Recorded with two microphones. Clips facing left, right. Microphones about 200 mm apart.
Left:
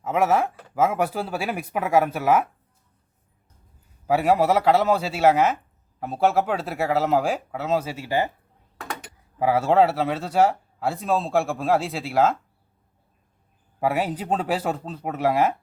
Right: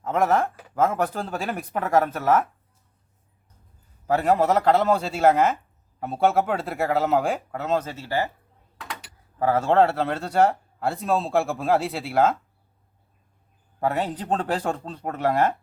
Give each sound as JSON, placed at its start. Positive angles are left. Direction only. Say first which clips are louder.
{"t": 0.0, "sound": "speech", "louder": "left 1 dB", "side_deg": 5}
{"t": 4.0, "sound": "speech", "louder": "left 1 dB", "side_deg": 10}
{"t": 8.8, "sound": "a sound", "louder": "left 4 dB", "side_deg": 45}
{"t": 9.4, "sound": "speech", "louder": "left 1 dB", "side_deg": 10}
{"t": 13.7, "sound": "speech", "louder": "left 1 dB", "side_deg": 10}